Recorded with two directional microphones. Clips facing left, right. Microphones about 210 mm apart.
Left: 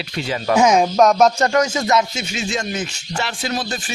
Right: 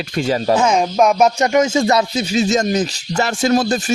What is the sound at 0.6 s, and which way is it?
Speech, 10° left (ahead or behind).